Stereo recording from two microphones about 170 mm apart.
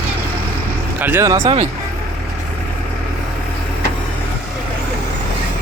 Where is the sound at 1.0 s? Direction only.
15° right (ahead or behind).